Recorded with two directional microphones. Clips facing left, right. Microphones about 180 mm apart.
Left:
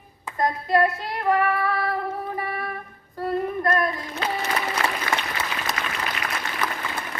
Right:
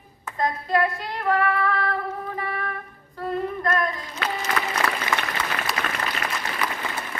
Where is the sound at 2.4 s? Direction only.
10° left (ahead or behind).